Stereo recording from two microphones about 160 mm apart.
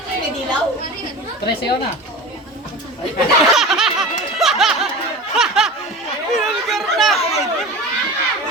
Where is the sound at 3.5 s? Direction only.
Centre (ahead or behind).